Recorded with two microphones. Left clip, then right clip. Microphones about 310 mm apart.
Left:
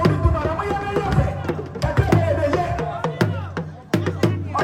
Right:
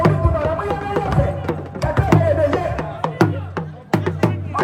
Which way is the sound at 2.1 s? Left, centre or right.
Right.